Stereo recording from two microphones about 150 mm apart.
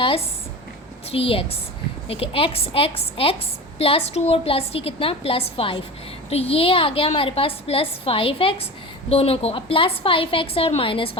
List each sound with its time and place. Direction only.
1.1 s a woman's voice: 40° left (ahead or behind)